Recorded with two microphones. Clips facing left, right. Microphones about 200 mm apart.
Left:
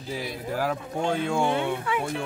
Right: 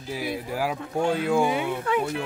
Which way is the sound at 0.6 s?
10° right (ahead or behind).